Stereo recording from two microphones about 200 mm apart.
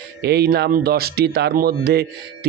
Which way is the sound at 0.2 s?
55° right (ahead or behind).